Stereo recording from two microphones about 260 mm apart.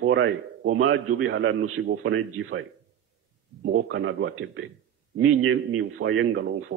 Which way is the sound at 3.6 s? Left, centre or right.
Right.